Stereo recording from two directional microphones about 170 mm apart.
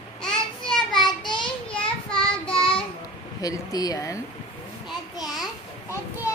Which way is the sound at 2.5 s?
30° left (ahead or behind).